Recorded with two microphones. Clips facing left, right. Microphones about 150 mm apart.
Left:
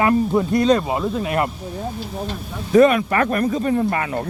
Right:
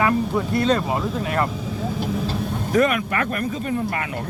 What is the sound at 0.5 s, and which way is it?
Speech, 15° left (ahead or behind).